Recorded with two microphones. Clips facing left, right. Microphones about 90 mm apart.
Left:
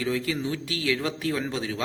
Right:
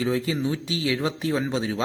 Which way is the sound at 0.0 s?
25° right (ahead or behind).